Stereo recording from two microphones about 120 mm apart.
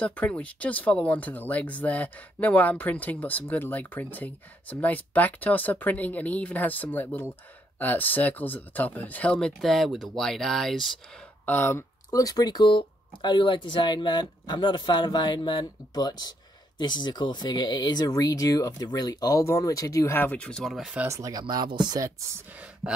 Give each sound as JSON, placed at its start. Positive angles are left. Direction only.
{"t": 0.0, "sound": "speech", "side_deg": 10}
{"t": 11.4, "sound": "speech", "side_deg": 20}
{"t": 21.1, "sound": "speech", "side_deg": -30}
{"t": 22.5, "sound": "a sound", "side_deg": -10}